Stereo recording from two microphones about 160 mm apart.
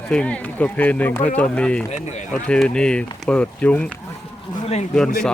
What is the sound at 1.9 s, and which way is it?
Speech, 45° left (ahead or behind).